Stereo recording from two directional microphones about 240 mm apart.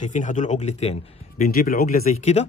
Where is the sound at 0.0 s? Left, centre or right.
Left.